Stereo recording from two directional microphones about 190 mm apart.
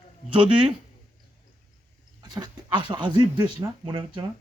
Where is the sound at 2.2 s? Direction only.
20° right (ahead or behind).